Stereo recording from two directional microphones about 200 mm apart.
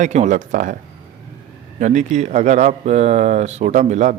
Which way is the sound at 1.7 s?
35° right (ahead or behind).